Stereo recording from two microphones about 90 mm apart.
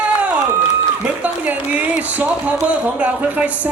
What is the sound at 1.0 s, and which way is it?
A woman's voice, 15° right (ahead or behind).